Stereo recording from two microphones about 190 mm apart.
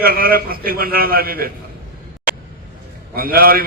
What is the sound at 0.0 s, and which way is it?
A man's voice, 50° right (ahead or behind).